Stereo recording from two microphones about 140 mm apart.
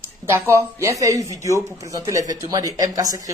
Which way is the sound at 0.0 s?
15° right (ahead or behind).